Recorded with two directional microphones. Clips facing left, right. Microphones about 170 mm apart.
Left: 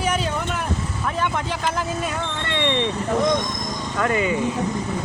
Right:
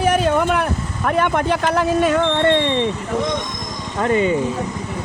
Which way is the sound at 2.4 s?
50° right (ahead or behind).